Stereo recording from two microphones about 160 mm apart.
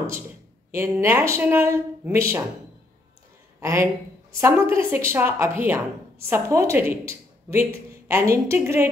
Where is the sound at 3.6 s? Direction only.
15° right (ahead or behind).